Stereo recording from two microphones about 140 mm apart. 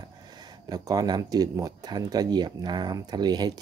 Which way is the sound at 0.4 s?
30° right (ahead or behind).